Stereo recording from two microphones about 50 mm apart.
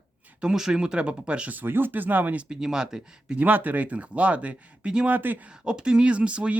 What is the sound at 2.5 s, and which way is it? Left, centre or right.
Speech, centre.